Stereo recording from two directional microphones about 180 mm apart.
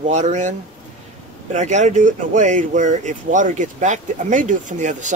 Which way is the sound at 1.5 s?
40° right (ahead or behind).